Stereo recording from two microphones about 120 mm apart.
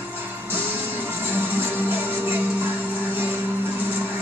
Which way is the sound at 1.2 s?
15° right (ahead or behind).